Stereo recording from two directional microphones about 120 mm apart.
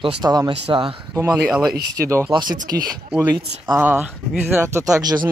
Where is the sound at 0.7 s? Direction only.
50° right (ahead or behind).